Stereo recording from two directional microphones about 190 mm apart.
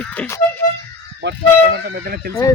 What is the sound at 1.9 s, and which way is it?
Speech, 50° right (ahead or behind).